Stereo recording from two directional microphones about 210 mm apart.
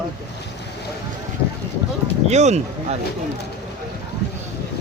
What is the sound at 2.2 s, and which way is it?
Speech, 30° right (ahead or behind).